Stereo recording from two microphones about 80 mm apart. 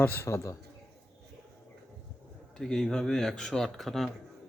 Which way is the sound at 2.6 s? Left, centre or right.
Centre.